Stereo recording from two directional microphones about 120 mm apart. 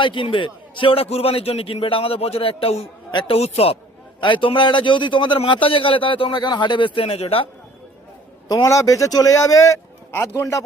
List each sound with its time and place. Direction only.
0.0 s a man's voice: 45° left (ahead or behind)
4.2 s a man's voice: 45° left (ahead or behind)
8.4 s speech: 30° left (ahead or behind)